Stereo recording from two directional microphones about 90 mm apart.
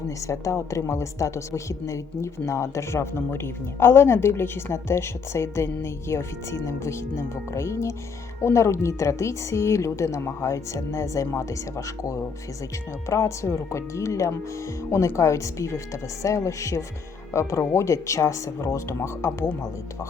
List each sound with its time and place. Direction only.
0.2 s a woman's voice: 35° left (ahead or behind)